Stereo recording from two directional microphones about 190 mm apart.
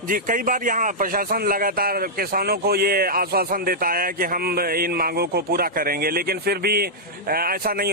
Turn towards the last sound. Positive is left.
turn(degrees=-50)  # may be behind; listen again after turning